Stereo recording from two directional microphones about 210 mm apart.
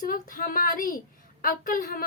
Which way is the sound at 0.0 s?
40° left (ahead or behind).